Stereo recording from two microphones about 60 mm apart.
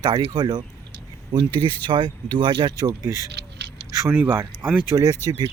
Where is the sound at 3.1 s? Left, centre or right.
Right.